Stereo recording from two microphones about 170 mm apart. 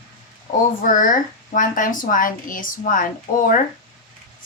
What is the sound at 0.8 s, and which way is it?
A woman's voice, 50° left (ahead or behind).